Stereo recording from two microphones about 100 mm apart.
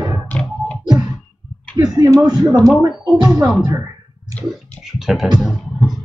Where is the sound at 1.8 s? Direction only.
40° right (ahead or behind).